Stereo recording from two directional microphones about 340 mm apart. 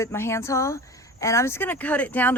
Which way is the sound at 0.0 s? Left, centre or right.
Centre.